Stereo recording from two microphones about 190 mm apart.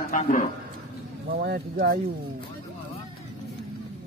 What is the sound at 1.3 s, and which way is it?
Speech, 55° right (ahead or behind).